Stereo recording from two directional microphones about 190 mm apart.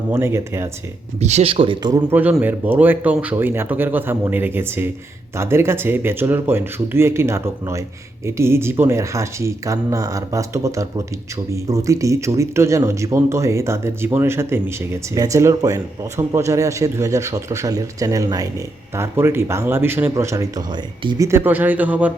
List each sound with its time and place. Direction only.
0.1 s speech: 15° right (ahead or behind)
1.2 s speech: 35° right (ahead or behind); by 22.1 s 10° right (ahead or behind)